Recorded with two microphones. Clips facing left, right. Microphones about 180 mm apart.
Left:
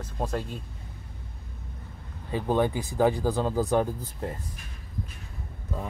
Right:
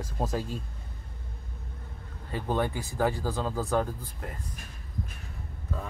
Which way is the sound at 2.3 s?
15° left (ahead or behind).